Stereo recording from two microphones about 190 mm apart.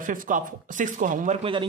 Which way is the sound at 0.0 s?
45° right (ahead or behind).